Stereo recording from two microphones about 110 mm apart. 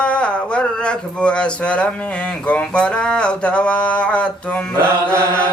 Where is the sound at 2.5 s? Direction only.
10° left (ahead or behind).